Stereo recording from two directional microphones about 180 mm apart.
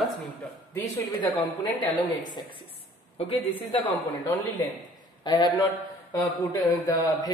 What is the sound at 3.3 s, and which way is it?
Speech, 10° left (ahead or behind).